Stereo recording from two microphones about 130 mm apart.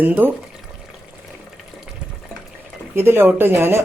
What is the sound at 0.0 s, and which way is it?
Speech, 15° right (ahead or behind).